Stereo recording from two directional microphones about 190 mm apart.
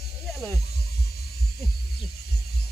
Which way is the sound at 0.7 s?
55° left (ahead or behind).